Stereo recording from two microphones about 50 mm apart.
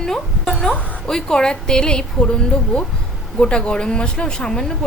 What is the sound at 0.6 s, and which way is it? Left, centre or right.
A woman's voice, centre.